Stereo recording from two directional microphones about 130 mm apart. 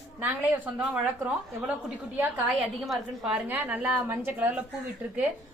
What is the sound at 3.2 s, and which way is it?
A woman's voice, 10° right (ahead or behind).